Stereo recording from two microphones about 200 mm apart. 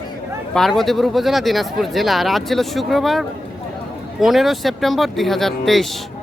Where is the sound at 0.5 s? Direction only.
Centre (ahead or behind).